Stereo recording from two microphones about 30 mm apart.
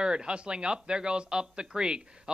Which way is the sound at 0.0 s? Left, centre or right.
Right.